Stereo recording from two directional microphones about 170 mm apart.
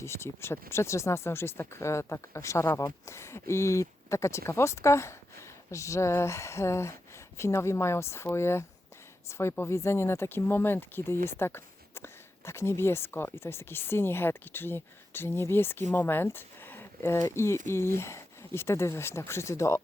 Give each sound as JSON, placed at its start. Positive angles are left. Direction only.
{"t": 0.0, "sound": "speech", "side_deg": 15}